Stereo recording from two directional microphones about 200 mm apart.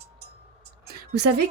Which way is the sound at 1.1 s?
55° right (ahead or behind).